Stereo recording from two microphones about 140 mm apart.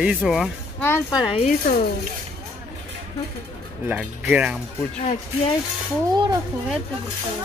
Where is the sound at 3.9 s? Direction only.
10° right (ahead or behind).